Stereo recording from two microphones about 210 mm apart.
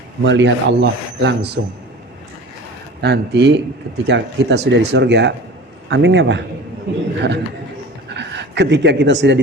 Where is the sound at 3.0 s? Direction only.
50° right (ahead or behind).